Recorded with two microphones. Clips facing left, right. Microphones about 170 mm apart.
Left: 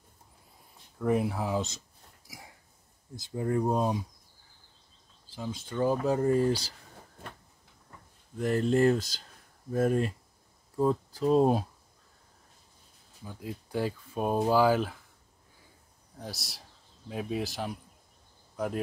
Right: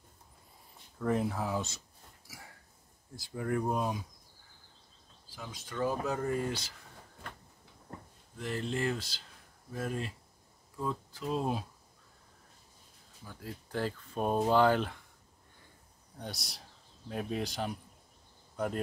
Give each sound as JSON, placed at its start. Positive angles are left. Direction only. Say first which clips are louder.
{"t": 0.9, "sound": "speech", "louder": "left 3 dB", "side_deg": 10}
{"t": 2.2, "sound": "hiccup", "louder": "left 3 dB", "side_deg": 15}
{"t": 3.2, "sound": "speech", "louder": "left 4 dB", "side_deg": 25}
{"t": 5.3, "sound": "speech", "louder": "left 7 dB", "side_deg": 25}
{"t": 8.4, "sound": "speech", "louder": "left 10 dB", "side_deg": 45}
{"t": 13.2, "sound": "speech", "louder": "left 5 dB", "side_deg": 15}
{"t": 16.2, "sound": "speech", "louder": "left 1 dB", "side_deg": 0}